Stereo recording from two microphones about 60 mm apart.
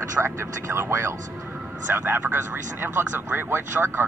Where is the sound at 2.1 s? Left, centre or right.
Right.